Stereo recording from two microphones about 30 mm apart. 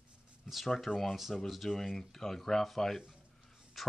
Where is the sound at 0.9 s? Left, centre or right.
Left.